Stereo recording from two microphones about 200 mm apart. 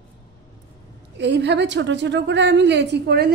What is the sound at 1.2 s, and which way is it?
A woman's voice, 60° right (ahead or behind).